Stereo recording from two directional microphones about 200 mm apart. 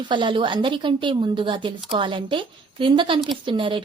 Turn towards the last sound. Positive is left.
turn(degrees=-25)  # may be behind; listen again after turning